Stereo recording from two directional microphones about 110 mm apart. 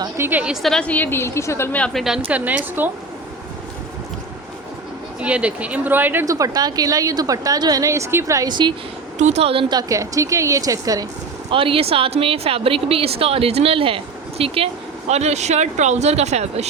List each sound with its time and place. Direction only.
0.2 s speech: 15° right (ahead or behind)
0.5 s a woman's voice: 5° left (ahead or behind); by 1.8 s 25° left (ahead or behind)
1.8 s a woman's voice: centre (ahead or behind)
2.2 s speech: 15° right (ahead or behind)
5.2 s speech: 10° right (ahead or behind)
6.2 s a woman's voice: 30° right (ahead or behind)
8.4 s speech: 45° right (ahead or behind)
9.1 s a woman's voice: 90° right; by 9.6 s 60° right (ahead or behind)
9.6 s a woman's voice: 35° right (ahead or behind)
11.5 s speech: 55° right (ahead or behind); by 16.6 s 85° right